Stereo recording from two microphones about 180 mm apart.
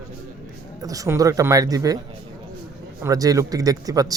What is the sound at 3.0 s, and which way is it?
A man's voice, 20° right (ahead or behind).